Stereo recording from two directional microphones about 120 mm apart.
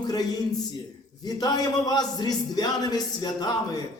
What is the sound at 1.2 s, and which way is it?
A man's voice, 35° left (ahead or behind).